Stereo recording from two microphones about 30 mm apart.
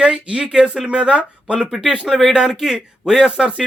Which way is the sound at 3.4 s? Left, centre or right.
Right.